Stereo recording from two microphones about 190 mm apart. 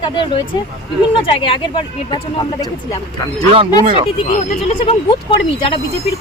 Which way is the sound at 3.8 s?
35° right (ahead or behind).